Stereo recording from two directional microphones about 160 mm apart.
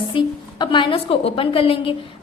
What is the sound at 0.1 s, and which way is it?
A woman's voice, 30° left (ahead or behind).